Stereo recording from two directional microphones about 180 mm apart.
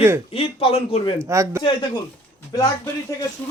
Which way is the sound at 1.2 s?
15° right (ahead or behind).